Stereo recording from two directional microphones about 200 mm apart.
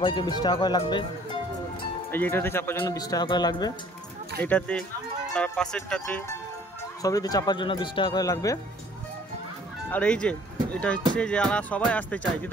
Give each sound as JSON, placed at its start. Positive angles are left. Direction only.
{"t": 0.0, "sound": "speech", "side_deg": 20}
{"t": 2.0, "sound": "speech", "side_deg": 10}
{"t": 4.4, "sound": "speech", "side_deg": 5}
{"t": 9.8, "sound": "speech", "side_deg": 5}